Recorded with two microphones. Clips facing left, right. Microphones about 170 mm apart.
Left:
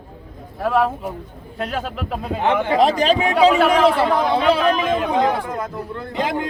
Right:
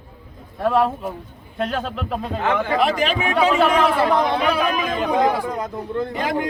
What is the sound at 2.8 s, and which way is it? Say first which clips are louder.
Speech: left 4 dB; 35° left (ahead or behind).